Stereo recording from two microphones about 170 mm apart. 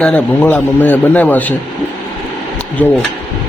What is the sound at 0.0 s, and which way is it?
A man's voice, 10° left (ahead or behind).